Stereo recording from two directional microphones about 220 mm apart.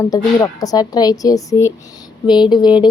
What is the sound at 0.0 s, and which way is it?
Speech, 15° left (ahead or behind).